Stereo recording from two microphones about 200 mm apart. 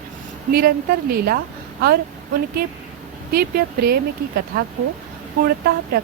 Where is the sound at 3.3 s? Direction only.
50° right (ahead or behind).